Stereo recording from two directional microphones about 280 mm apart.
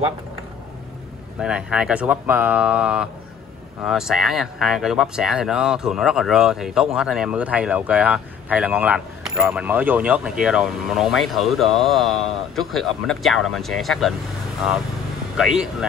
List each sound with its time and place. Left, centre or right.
1.4 s speech: centre
15.3 s speech: centre